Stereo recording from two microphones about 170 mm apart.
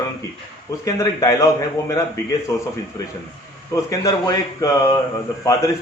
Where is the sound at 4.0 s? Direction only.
20° left (ahead or behind).